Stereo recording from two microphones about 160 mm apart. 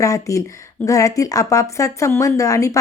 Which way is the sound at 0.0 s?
20° left (ahead or behind).